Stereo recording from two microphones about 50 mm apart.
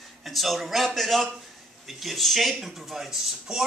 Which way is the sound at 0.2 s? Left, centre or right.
Centre.